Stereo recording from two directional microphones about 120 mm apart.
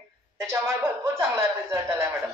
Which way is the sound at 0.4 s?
20° right (ahead or behind).